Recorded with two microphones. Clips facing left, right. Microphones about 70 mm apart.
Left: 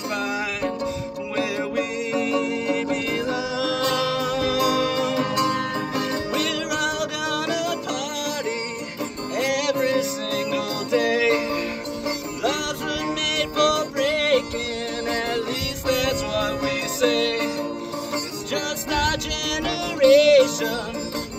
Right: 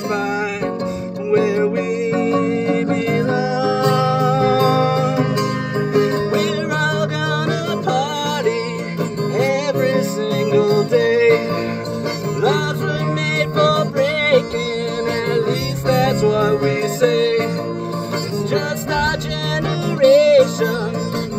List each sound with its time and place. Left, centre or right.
1.3 s music: right
9.4 s music: right
12.4 s music: right
15.9 s music: right
18.5 s music: right